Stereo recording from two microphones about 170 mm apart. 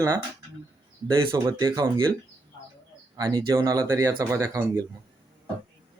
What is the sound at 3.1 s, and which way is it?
Speech, 25° right (ahead or behind).